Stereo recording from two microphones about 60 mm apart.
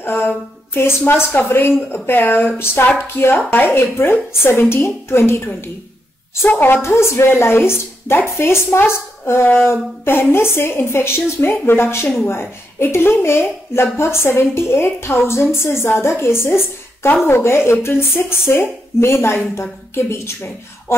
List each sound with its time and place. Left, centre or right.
0.0 s a sound: left
0.7 s a woman's voice: left
6.5 s a woman's voice: left
6.8 s speech: left